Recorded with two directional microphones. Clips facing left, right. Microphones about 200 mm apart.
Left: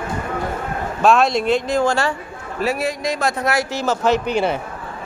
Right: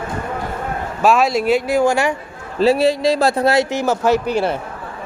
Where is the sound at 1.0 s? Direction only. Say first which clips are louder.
Even; 5° right (ahead or behind).